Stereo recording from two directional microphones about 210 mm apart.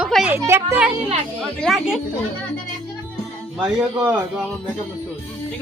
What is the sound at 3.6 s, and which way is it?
Speech, 5° right (ahead or behind).